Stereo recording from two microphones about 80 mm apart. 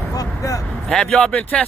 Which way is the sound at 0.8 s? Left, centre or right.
Centre.